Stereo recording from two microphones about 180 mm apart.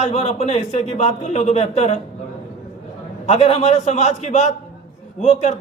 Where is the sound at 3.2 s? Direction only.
35° left (ahead or behind).